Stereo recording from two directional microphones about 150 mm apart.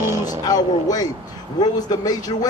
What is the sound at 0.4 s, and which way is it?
A man's voice, 25° left (ahead or behind).